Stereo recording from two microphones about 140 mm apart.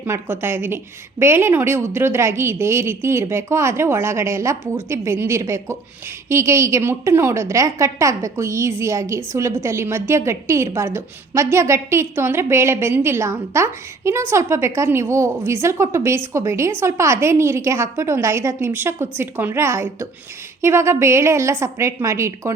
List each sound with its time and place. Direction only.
0.0 s a woman's voice: 15° right (ahead or behind)